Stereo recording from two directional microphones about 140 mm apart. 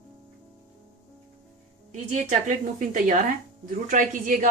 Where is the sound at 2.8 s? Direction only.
65° right (ahead or behind).